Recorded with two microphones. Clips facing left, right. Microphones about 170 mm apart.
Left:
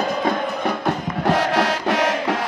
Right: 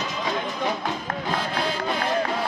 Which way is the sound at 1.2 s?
75° left (ahead or behind).